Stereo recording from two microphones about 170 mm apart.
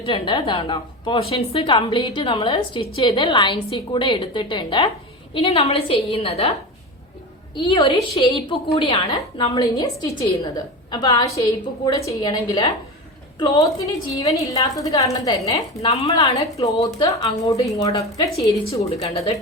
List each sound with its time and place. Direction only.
0.0 s a woman's voice: 30° left (ahead or behind)
9.0 s a woman's voice: 20° left (ahead or behind)
15.4 s a woman's voice: 30° left (ahead or behind)
19.0 s a woman's voice: 35° left (ahead or behind)